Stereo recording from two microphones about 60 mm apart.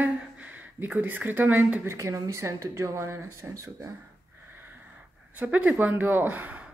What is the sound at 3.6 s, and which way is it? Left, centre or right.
Speech, right.